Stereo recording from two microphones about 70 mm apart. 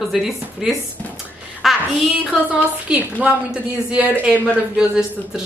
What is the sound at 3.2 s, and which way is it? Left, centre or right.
Speech, centre.